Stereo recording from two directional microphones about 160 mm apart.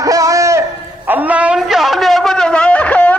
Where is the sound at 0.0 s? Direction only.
20° right (ahead or behind).